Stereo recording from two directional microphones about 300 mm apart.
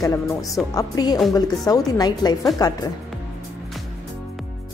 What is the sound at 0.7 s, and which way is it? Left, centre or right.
A woman's voice, centre.